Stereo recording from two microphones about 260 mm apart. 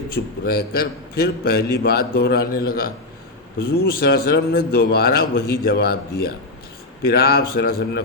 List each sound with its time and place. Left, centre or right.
0.1 s a man's voice: left